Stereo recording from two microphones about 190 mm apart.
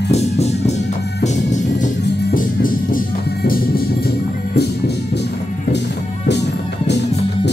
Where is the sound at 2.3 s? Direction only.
45° left (ahead or behind).